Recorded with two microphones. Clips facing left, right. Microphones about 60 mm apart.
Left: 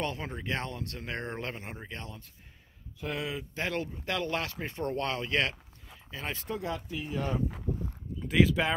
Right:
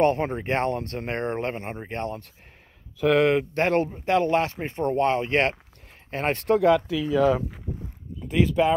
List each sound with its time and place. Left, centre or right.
0.0 s speech: right
3.0 s speech: right
6.0 s speech: right